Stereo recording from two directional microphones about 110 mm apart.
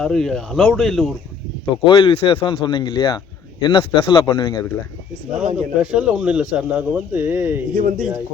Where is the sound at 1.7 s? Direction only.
40° left (ahead or behind).